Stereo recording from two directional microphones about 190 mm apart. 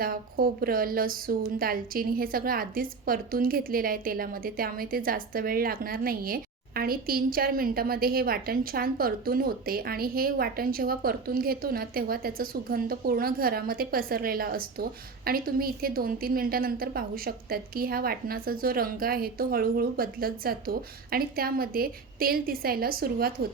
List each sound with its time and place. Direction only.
0.0 s a woman's voice: 50° right (ahead or behind)